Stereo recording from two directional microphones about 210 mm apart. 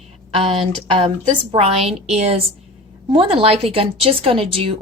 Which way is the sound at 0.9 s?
20° right (ahead or behind).